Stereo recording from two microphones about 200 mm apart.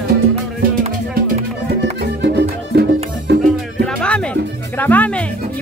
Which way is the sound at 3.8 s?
5° left (ahead or behind).